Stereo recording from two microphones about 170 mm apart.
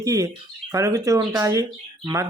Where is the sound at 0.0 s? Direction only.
20° right (ahead or behind).